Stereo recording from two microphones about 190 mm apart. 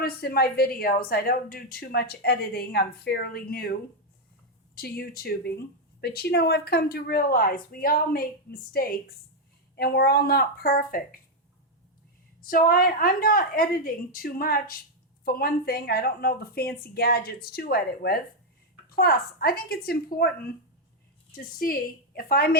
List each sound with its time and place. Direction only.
0.0 s a woman's voice: 55° left (ahead or behind)
12.4 s speech: 50° left (ahead or behind)